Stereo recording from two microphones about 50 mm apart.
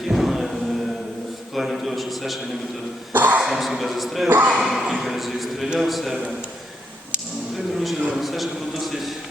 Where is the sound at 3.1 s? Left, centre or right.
Right.